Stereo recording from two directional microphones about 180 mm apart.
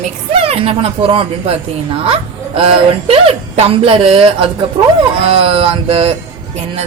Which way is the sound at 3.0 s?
35° right (ahead or behind).